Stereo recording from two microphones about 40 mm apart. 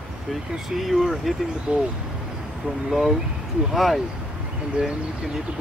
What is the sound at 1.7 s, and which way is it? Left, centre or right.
Speech, right.